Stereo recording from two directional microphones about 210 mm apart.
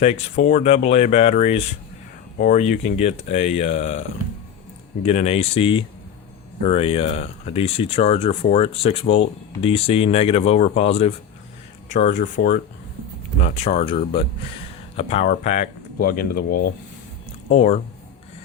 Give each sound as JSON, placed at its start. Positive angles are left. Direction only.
{"t": 0.0, "sound": "speech", "side_deg": 35}
{"t": 5.0, "sound": "speech", "side_deg": 30}
{"t": 12.4, "sound": "speech", "side_deg": 50}
{"t": 13.4, "sound": "speech", "side_deg": 30}
{"t": 17.5, "sound": "speech", "side_deg": 30}